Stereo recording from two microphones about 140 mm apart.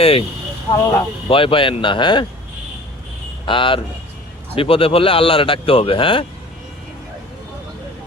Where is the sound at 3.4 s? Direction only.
35° left (ahead or behind).